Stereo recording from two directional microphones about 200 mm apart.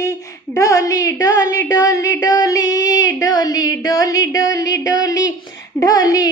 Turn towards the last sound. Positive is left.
turn(degrees=20)  # may be behind; listen again after turning